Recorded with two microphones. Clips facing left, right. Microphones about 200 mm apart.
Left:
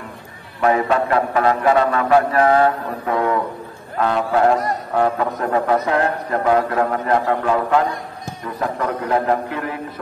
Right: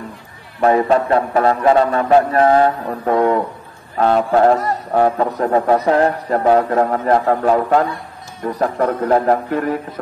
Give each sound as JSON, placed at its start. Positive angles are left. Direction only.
{"t": 0.6, "sound": "speech", "side_deg": -30}